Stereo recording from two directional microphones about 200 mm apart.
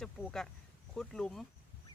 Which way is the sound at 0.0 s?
Centre (ahead or behind).